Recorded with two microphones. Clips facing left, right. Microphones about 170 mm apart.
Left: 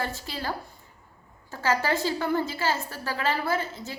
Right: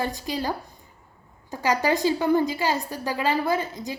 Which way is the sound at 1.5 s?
15° right (ahead or behind).